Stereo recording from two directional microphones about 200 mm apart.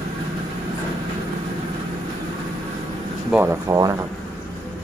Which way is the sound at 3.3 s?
10° right (ahead or behind).